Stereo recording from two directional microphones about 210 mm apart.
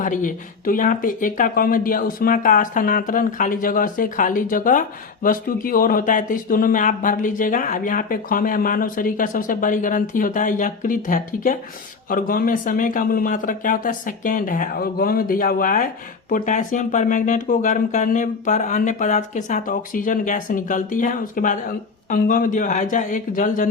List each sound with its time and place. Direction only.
0.0 s speech: 40° left (ahead or behind)